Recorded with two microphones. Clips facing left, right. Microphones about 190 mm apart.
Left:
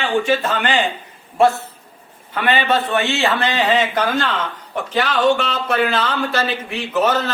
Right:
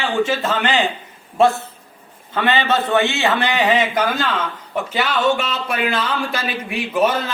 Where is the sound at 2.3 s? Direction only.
20° right (ahead or behind).